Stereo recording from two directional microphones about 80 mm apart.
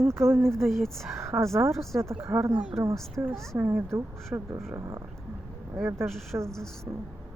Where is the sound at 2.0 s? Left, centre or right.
Right.